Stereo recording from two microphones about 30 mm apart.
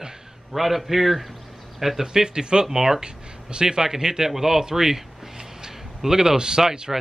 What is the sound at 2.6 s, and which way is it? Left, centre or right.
Speech, centre.